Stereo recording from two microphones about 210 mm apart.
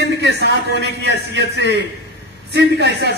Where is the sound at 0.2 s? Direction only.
55° right (ahead or behind).